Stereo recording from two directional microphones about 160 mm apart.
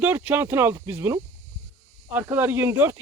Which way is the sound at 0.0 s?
10° right (ahead or behind).